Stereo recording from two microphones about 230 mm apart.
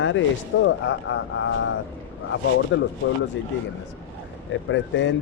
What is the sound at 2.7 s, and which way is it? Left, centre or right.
Speech, left.